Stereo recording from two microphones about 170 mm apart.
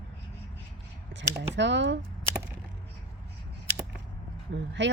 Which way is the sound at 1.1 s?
90° right.